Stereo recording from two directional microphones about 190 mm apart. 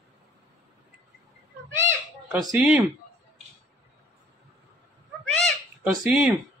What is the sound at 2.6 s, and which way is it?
Speech, centre (ahead or behind).